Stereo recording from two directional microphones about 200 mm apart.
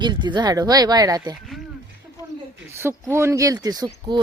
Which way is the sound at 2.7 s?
10° right (ahead or behind).